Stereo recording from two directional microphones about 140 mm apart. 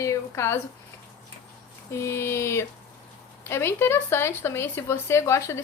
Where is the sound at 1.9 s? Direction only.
20° left (ahead or behind).